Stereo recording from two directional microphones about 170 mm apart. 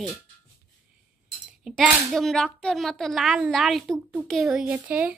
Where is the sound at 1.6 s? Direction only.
Centre (ahead or behind).